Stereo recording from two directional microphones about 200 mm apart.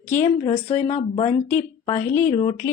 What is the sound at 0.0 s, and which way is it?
Speech, 10° left (ahead or behind).